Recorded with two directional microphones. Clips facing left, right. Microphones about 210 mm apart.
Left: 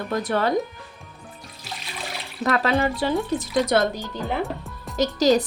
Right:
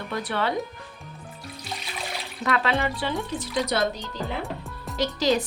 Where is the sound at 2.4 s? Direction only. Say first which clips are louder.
Left 4 dB; 45° left (ahead or behind).